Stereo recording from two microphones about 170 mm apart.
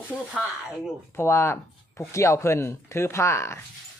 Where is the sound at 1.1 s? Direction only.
15° left (ahead or behind).